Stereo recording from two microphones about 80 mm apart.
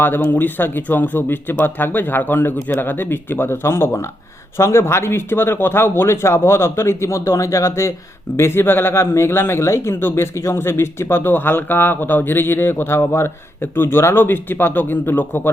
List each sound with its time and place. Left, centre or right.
0.0 s speech: left